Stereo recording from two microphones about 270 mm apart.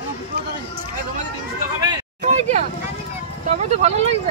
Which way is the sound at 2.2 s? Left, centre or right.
Right.